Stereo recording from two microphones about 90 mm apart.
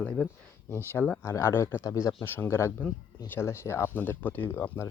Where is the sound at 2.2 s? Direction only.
25° left (ahead or behind).